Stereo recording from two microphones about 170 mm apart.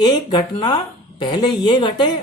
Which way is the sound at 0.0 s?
25° left (ahead or behind).